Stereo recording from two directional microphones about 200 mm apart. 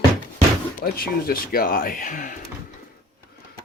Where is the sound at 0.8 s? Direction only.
45° left (ahead or behind).